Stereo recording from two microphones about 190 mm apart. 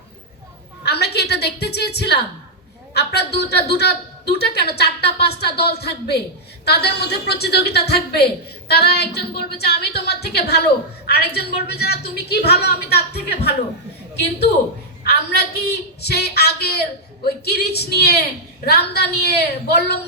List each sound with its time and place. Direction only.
0.9 s a woman's voice: 60° left (ahead or behind)
15.0 s a woman's voice: 55° left (ahead or behind)